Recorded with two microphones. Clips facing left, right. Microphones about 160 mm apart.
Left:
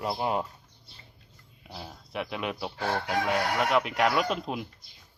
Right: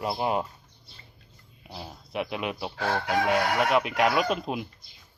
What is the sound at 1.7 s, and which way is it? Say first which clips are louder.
Speech: right 3 dB; 10° right (ahead or behind).